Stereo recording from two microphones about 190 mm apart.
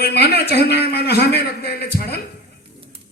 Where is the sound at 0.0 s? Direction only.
60° left (ahead or behind).